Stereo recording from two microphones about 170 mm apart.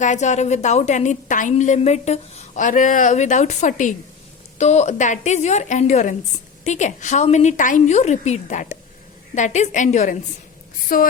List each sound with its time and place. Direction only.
0.0 s a woman's voice: 45° left (ahead or behind)